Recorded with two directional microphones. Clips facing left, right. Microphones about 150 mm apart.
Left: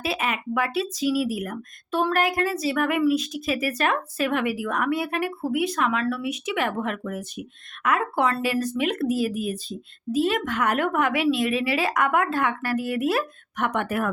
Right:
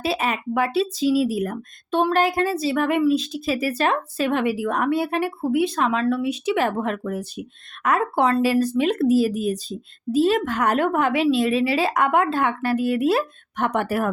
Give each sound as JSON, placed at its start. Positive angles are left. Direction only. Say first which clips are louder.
{"t": 0.0, "sound": "speech", "louder": "right 3 dB", "side_deg": -30}